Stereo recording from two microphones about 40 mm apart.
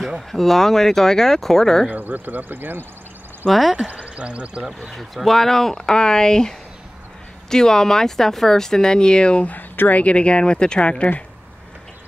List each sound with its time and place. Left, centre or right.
0.3 s speech: centre
1.9 s speech: right
3.4 s speech: centre
3.8 s speech: right
4.9 s speech: centre; by 9.5 s left
9.5 s speech: left